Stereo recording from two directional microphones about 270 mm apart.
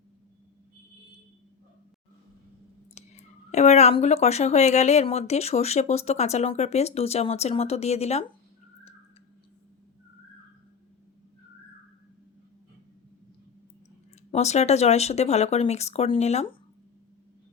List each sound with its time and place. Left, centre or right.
2.9 s speech: left
14.3 s speech: left